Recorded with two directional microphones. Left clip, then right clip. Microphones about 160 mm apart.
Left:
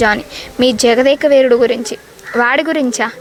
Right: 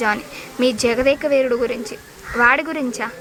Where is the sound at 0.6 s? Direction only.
30° left (ahead or behind).